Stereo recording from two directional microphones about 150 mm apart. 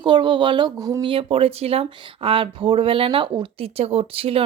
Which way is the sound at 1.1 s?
40° right (ahead or behind).